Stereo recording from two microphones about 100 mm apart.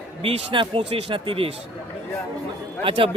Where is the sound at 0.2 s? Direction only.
70° right (ahead or behind).